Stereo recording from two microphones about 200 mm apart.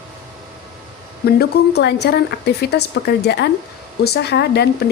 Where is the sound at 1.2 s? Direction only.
55° left (ahead or behind).